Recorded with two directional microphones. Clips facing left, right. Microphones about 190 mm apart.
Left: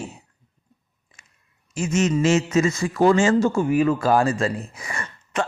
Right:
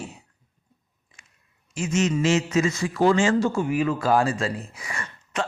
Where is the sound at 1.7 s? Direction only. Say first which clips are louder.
Left 2 dB; 50° left (ahead or behind).